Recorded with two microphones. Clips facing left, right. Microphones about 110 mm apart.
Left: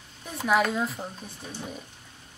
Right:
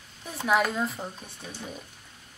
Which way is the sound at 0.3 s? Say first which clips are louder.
Left 1 dB; centre (ahead or behind).